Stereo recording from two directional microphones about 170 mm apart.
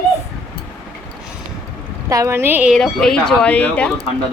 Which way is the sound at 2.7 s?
5° left (ahead or behind).